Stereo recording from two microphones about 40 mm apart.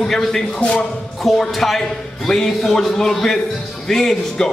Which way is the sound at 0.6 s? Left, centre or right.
Left.